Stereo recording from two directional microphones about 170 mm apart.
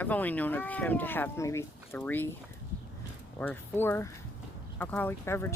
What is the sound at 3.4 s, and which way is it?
Speech, 10° left (ahead or behind).